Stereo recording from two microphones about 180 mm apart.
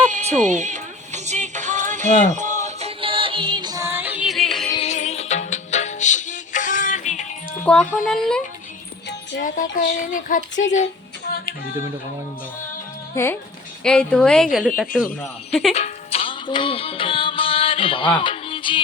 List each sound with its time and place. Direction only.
0.1 s music: 40° right (ahead or behind); by 4.7 s centre (ahead or behind)
4.7 s music: 35° left (ahead or behind)
7.6 s wind chime: 5° left (ahead or behind)
8.1 s a woman's voice: 5° left (ahead or behind)
10.1 s speech: 45° left (ahead or behind)
11.3 s music: 55° left (ahead or behind)
13.2 s speech: 15° left (ahead or behind)
13.8 s a woman's voice: 5° left (ahead or behind)
15.7 s music: 35° left (ahead or behind)